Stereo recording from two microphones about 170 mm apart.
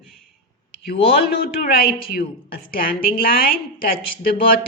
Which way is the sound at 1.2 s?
65° left (ahead or behind).